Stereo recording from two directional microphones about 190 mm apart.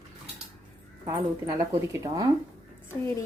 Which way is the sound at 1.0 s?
15° right (ahead or behind).